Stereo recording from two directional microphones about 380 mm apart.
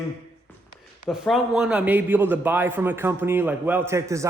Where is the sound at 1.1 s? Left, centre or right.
Centre.